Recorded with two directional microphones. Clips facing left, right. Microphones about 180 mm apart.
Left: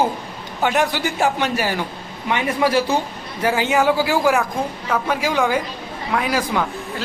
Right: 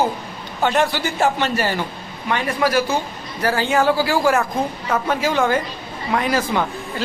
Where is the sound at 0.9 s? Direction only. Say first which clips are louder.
Even; 15° left (ahead or behind).